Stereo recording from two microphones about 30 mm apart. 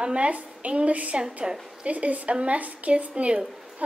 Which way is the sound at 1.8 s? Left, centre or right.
Right.